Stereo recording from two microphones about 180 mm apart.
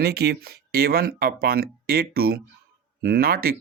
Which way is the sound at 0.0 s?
60° right (ahead or behind).